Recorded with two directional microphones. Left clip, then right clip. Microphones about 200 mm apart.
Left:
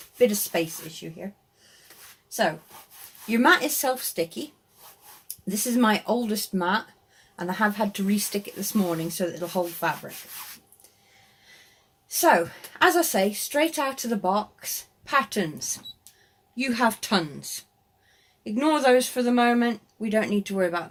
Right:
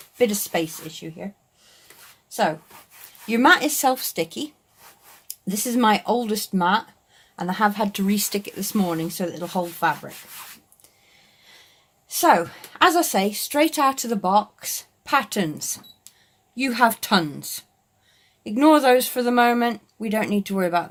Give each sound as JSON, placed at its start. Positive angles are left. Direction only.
{"t": 0.2, "sound": "a woman's voice", "side_deg": -45}
{"t": 3.2, "sound": "a woman's voice", "side_deg": -45}
{"t": 12.0, "sound": "a woman's voice", "side_deg": -45}